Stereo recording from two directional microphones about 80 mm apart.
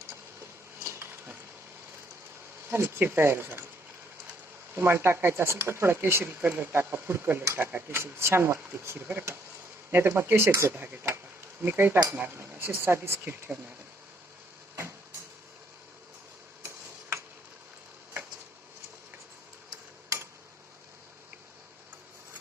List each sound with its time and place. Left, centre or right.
0.8 s a sound: right
2.6 s speech: right
4.7 s speech: right